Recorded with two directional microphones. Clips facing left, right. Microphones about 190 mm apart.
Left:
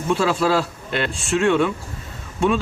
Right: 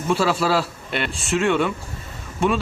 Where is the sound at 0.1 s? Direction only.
5° right (ahead or behind).